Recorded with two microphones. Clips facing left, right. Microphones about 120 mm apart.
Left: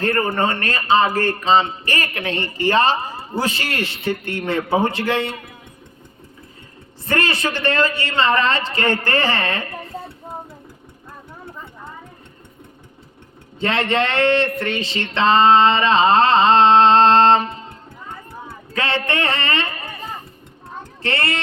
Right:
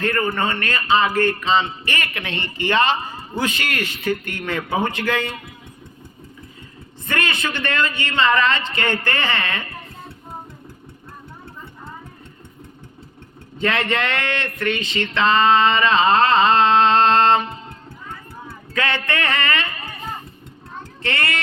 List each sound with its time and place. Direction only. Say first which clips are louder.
0.0 s a man's voice: left 2 dB; 35° left (ahead or behind)
7.0 s a man's voice: left 3 dB; 35° left (ahead or behind)
13.6 s a man's voice: left 2 dB; 30° left (ahead or behind)
14.6 s a sound: right 1 dB; 30° left (ahead or behind)
18.4 s speech: even; 30° left (ahead or behind)
21.0 s a man's voice: left 2 dB; 30° left (ahead or behind)